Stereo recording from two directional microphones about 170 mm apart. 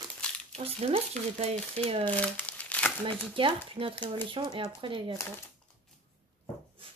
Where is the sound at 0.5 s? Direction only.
35° right (ahead or behind).